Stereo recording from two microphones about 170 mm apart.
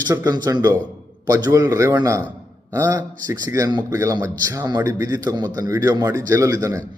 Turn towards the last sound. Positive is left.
turn(degrees=-20)  # may be behind; listen again after turning